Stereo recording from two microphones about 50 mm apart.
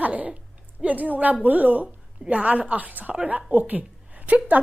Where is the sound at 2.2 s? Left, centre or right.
Right.